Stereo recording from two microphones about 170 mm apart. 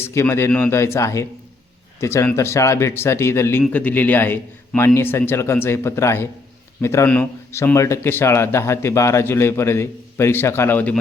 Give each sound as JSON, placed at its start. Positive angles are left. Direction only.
{"t": 0.0, "sound": "speech", "side_deg": 15}